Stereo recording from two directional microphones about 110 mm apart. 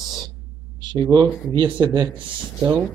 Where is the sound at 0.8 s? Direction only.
45° right (ahead or behind).